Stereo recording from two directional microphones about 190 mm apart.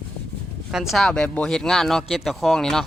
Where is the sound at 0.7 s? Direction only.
Centre (ahead or behind).